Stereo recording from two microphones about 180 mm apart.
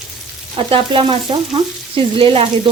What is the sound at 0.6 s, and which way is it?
Frying, 30° right (ahead or behind).